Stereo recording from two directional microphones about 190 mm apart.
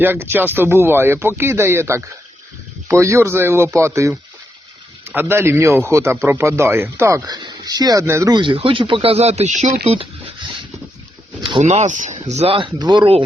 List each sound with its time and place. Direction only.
0.0 s a man's voice: 10° right (ahead or behind); by 10.1 s 30° right (ahead or behind)
11.4 s speech: 35° right (ahead or behind)